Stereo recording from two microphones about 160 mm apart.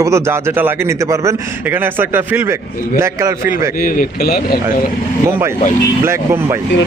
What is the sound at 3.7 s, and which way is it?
Speech, 60° left (ahead or behind).